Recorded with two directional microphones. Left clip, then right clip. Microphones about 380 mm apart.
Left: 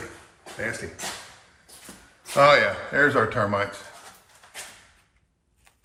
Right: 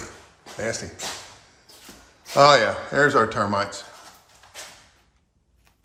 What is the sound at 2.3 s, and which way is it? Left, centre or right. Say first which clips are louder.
Speech: right 2 dB; centre.